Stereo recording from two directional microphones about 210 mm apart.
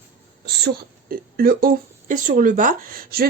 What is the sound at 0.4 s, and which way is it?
A woman's voice, 50° right (ahead or behind).